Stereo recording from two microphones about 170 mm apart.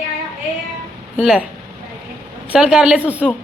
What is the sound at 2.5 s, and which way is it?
Speech, 5° right (ahead or behind).